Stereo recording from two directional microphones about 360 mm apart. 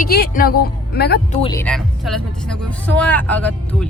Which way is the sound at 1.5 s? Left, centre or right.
Centre.